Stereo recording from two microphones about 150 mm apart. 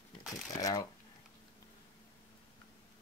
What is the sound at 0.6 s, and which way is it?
Speech, 25° left (ahead or behind).